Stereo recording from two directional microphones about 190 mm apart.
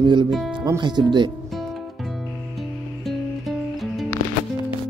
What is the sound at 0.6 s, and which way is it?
Speech, 20° right (ahead or behind).